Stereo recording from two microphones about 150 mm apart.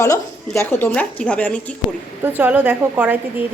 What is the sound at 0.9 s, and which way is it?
Speech, 10° left (ahead or behind).